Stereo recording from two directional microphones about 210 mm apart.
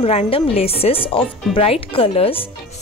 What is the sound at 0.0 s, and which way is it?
Speech, 30° left (ahead or behind).